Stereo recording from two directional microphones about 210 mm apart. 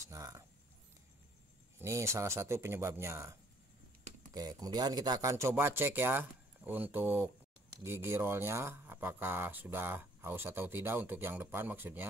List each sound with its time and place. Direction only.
0.1 s speech: 15° right (ahead or behind)
1.8 s speech: 15° right (ahead or behind)